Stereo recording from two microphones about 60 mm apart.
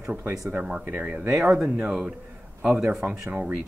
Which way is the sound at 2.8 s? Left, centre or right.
Right.